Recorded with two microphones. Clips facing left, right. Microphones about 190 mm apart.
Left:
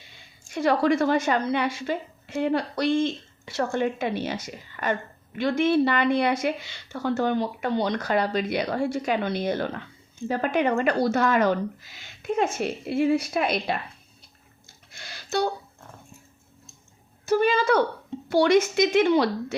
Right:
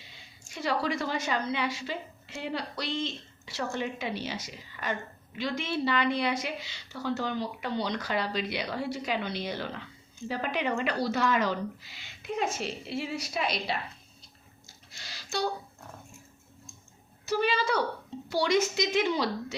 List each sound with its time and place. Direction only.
0.1 s a woman's voice: 55° left (ahead or behind)
14.9 s a sound: 55° left (ahead or behind)
17.2 s a woman's voice: 50° left (ahead or behind)